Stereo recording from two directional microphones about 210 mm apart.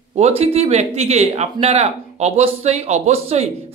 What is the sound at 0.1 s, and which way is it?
Speech, 30° right (ahead or behind).